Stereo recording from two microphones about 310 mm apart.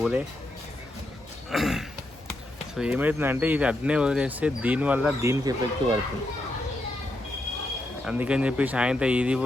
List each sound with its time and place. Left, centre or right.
1.5 s speech: centre
8.0 s speech: centre